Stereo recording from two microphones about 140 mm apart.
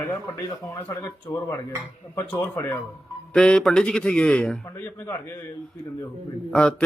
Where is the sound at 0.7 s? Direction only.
20° left (ahead or behind).